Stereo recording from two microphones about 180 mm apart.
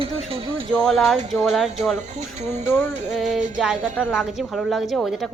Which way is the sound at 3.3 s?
45° right (ahead or behind).